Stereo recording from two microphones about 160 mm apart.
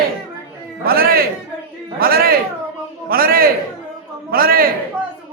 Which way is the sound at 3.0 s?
65° right (ahead or behind).